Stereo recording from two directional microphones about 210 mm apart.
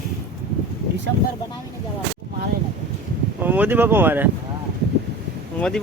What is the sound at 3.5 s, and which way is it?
Speech, 10° right (ahead or behind).